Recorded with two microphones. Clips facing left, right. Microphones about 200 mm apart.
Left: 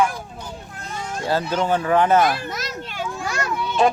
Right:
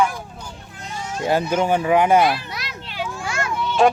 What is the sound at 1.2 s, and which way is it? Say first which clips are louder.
Speech: right 3 dB; 20° right (ahead or behind).